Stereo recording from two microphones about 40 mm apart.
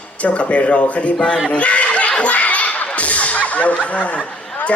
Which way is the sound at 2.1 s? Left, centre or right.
Left.